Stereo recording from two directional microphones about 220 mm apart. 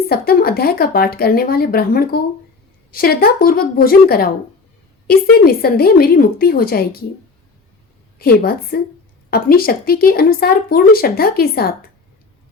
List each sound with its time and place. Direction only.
0.1 s speech: 45° left (ahead or behind)
8.2 s speech: 45° left (ahead or behind)